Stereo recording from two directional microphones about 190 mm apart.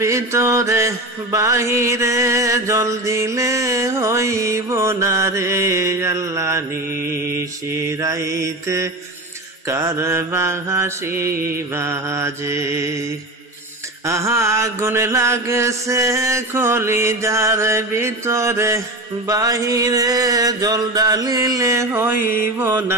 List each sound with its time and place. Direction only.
0.0 s mantra: 15° right (ahead or behind)
14.0 s mantra: 15° right (ahead or behind)